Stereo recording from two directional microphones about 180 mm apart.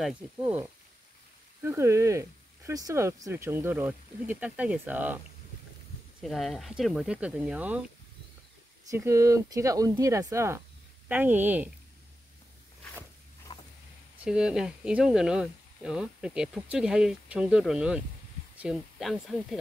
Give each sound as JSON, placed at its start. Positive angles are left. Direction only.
{"t": 0.0, "sound": "speech", "side_deg": -5}
{"t": 6.2, "sound": "speech", "side_deg": 0}
{"t": 8.8, "sound": "speech", "side_deg": -15}
{"t": 13.5, "sound": "vehicle", "side_deg": 30}
{"t": 14.2, "sound": "speech", "side_deg": -5}